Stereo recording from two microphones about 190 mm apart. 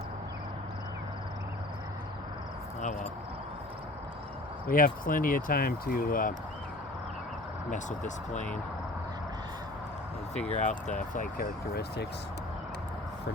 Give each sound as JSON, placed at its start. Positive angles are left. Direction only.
{"t": 4.7, "sound": "speech", "side_deg": 45}
{"t": 7.7, "sound": "speech", "side_deg": 40}
{"t": 10.5, "sound": "speech", "side_deg": 40}